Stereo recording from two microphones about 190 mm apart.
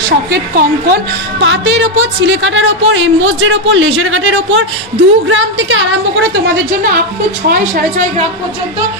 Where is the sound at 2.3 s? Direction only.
85° right.